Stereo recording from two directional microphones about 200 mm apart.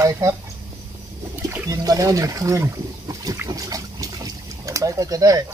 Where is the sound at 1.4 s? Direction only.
15° right (ahead or behind).